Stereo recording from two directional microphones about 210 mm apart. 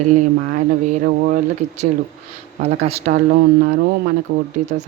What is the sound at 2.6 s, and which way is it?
Speech, 30° right (ahead or behind).